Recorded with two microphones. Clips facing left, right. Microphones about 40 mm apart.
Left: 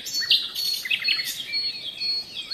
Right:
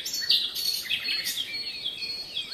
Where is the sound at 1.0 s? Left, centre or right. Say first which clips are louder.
Left 5 dB; left.